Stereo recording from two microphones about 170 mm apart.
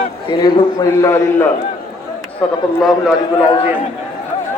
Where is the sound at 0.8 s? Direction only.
15° left (ahead or behind).